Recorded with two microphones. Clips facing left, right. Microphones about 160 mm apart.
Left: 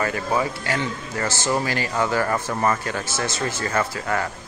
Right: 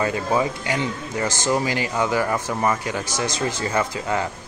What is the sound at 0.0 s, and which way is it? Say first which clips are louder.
Speech: right 2 dB; 20° right (ahead or behind).